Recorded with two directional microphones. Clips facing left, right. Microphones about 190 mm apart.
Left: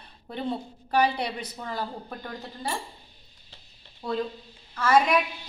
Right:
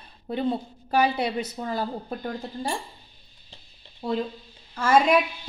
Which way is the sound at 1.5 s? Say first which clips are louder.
Right 4 dB; 30° right (ahead or behind).